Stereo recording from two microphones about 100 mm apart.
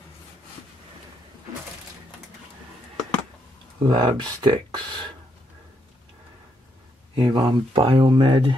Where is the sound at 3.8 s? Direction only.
50° right (ahead or behind).